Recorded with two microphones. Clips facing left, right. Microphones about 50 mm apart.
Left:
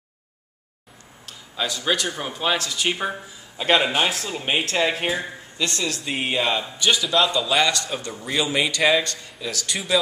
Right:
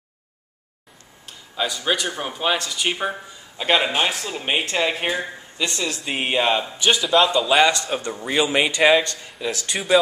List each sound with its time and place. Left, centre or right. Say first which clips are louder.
1.2 s speech: right 2 dB; centre
7.1 s speech: right 6 dB; centre
7.6 s a man's voice: right 4 dB; right